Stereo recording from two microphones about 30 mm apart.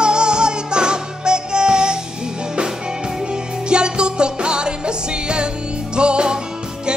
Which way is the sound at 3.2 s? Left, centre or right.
Right.